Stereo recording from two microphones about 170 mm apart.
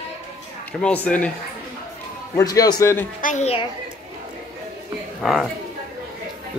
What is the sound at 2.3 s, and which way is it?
Speech, 20° left (ahead or behind).